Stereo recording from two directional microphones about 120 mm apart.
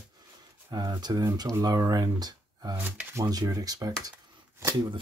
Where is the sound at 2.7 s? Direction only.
15° right (ahead or behind).